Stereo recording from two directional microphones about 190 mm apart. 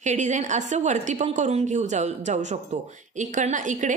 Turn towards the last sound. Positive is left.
turn(degrees=-40)  # may be behind; listen again after turning